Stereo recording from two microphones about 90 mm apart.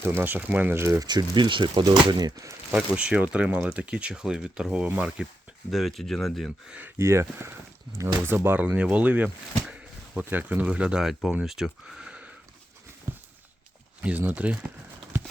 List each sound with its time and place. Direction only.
0.0 s speech: 25° right (ahead or behind)
0.9 s speech: 45° right (ahead or behind)
2.3 s speech: 35° right (ahead or behind)
2.7 s speech: 10° right (ahead or behind)
5.7 s speech: centre (ahead or behind)
6.7 s speech: 15° right (ahead or behind)
7.0 s speech: 30° right (ahead or behind); by 12.3 s 10° right (ahead or behind)
13.1 s a sound: 30° right (ahead or behind)
14.0 s speech: 15° right (ahead or behind)